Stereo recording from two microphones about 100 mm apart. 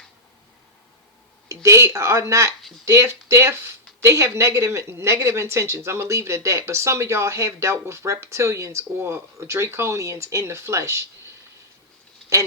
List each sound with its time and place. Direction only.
1.5 s speech: 30° right (ahead or behind)